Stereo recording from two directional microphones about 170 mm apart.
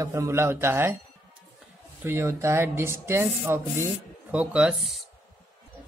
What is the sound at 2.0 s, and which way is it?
Speech, 15° right (ahead or behind).